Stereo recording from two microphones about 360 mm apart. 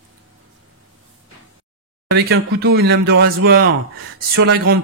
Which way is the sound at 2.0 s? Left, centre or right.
Right.